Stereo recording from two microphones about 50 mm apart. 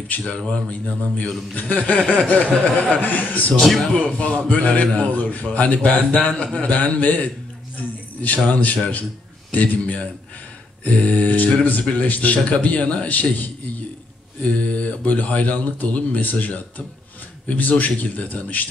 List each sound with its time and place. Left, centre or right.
0.1 s speech: left
3.5 s a man's voice: centre
3.9 s speech: left
7.7 s a sound: left
8.5 s speech: left
14.6 s speech: left